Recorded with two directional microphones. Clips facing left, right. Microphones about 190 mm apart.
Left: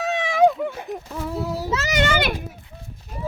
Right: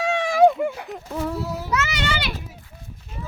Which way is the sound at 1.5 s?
35° left (ahead or behind).